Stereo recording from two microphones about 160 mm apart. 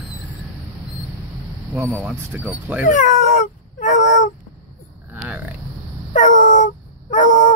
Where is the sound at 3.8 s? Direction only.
50° left (ahead or behind).